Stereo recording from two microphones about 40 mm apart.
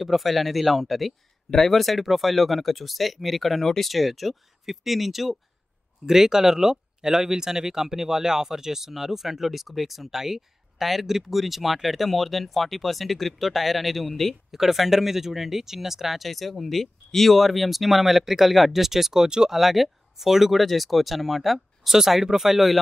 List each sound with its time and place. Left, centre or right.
0.0 s speech: centre
19.2 s speech: centre
19.5 s speech: centre